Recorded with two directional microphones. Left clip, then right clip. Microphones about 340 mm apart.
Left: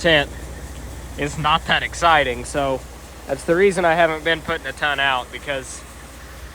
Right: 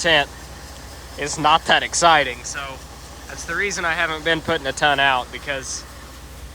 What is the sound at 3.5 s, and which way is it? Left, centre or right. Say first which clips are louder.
Speech: left 6 dB; centre.